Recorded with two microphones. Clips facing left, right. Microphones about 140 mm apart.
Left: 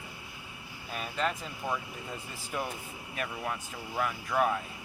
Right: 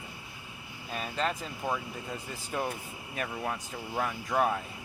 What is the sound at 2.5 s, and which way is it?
Speech, 40° right (ahead or behind).